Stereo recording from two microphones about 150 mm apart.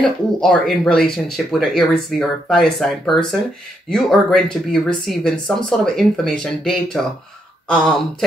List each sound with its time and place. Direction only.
0.4 s speech: 5° left (ahead or behind)